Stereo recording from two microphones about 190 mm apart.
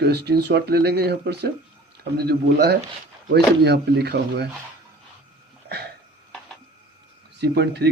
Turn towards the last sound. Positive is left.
turn(degrees=-60)  # may be behind; listen again after turning